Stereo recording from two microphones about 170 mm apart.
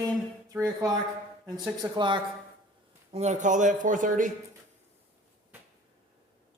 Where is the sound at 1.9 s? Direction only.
30° right (ahead or behind).